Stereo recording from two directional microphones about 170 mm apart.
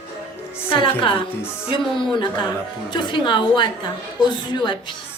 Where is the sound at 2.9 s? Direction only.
25° left (ahead or behind).